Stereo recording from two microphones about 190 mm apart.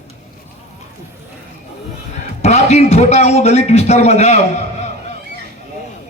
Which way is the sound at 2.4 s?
35° left (ahead or behind).